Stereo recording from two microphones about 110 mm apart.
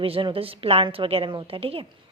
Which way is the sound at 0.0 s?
60° right (ahead or behind).